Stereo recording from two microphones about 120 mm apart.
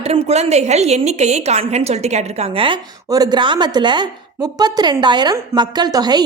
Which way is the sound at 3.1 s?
35° right (ahead or behind).